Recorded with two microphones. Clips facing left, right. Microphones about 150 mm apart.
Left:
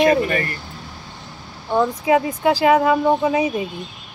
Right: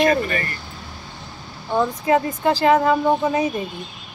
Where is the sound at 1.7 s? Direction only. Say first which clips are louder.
Left 2 dB; 5° left (ahead or behind).